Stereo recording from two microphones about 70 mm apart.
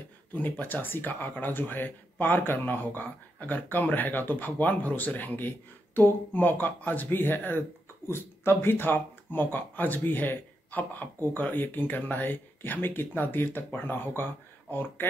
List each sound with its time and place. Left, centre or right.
0.3 s speech: left